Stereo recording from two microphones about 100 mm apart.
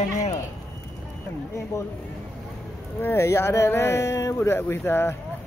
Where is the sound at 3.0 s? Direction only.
25° left (ahead or behind).